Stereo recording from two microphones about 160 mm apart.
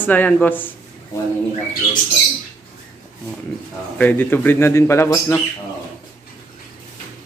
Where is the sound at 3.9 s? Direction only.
10° left (ahead or behind).